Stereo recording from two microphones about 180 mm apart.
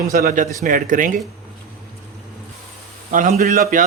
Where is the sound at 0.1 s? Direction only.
55° right (ahead or behind).